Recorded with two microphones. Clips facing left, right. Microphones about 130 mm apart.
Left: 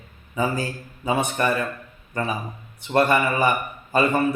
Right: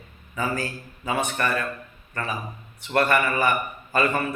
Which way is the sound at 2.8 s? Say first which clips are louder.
Left 2 dB; 20° left (ahead or behind).